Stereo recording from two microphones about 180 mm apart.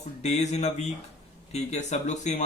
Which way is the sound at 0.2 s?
40° left (ahead or behind).